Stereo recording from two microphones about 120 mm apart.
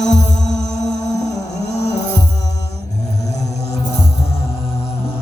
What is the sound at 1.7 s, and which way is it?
Music, 70° left (ahead or behind).